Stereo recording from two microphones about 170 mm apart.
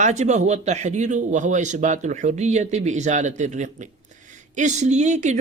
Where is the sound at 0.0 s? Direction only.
45° right (ahead or behind).